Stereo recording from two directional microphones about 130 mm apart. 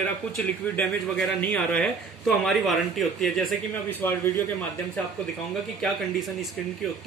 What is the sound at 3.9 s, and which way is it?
Speech, 15° left (ahead or behind).